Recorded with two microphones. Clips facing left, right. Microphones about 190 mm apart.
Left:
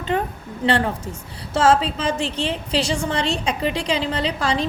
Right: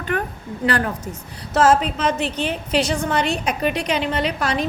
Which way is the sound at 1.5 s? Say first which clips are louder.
Right 1 dB; 30° left (ahead or behind).